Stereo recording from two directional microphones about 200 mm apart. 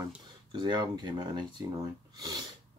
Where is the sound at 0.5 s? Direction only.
25° right (ahead or behind).